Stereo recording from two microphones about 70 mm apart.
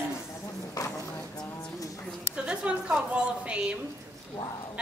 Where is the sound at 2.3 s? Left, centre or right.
Centre.